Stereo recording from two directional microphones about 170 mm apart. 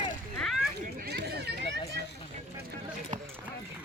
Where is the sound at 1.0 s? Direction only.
75° right (ahead or behind).